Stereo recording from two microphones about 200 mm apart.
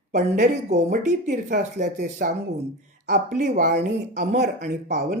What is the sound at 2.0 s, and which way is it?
Speech, 50° right (ahead or behind).